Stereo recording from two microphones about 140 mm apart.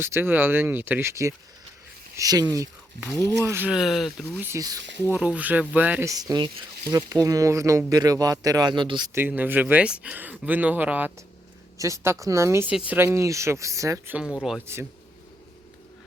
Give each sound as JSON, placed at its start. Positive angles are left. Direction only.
{"t": 0.0, "sound": "speech", "side_deg": -15}
{"t": 3.7, "sound": "speech", "side_deg": 0}
{"t": 4.4, "sound": "speech", "side_deg": -15}
{"t": 6.1, "sound": "speech", "side_deg": -25}
{"t": 9.1, "sound": "speech", "side_deg": -15}